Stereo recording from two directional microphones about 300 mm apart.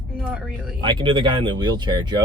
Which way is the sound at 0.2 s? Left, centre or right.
Centre.